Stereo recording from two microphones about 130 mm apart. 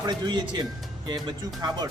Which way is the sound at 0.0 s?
35° right (ahead or behind).